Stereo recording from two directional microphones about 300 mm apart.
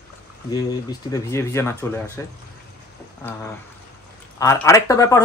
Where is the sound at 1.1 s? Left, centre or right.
Centre.